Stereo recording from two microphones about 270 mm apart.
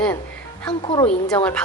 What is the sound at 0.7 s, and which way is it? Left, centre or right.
Speech, centre.